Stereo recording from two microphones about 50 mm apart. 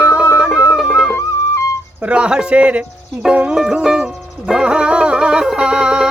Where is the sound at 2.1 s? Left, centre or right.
Centre.